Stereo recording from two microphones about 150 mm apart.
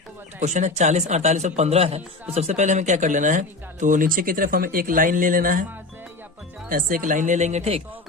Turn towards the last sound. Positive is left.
turn(degrees=-45)  # may be behind; listen again after turning